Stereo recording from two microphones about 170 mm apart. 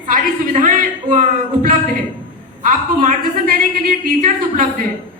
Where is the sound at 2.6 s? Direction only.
50° right (ahead or behind).